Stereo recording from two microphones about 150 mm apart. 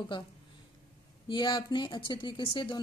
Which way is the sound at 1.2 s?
35° left (ahead or behind).